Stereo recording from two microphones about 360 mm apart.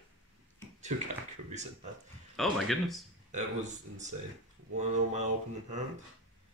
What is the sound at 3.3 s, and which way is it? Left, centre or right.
Speech, centre.